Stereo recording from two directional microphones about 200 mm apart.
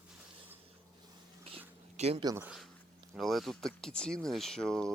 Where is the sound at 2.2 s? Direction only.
15° right (ahead or behind).